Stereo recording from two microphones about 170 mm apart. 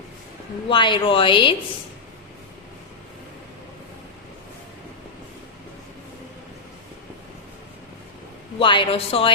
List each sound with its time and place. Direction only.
0.7 s a woman's voice: 30° left (ahead or behind)
8.5 s a woman's voice: 30° left (ahead or behind)